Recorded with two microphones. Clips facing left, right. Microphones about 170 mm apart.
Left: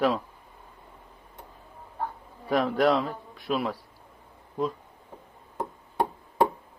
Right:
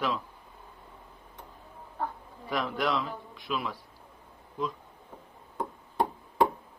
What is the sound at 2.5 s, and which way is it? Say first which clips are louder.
A man's voice: left 7 dB; 40° left (ahead or behind).